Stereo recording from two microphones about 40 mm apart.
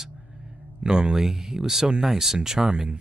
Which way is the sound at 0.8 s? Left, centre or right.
Right.